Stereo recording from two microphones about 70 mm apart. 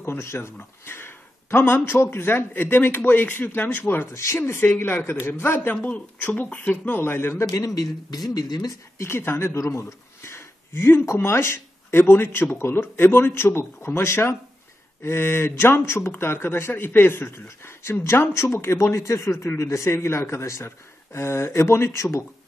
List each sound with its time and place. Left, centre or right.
0.0 s speech: left
5.8 s speech: centre
7.0 s speech: left
7.5 s speech: left
8.9 s speech: left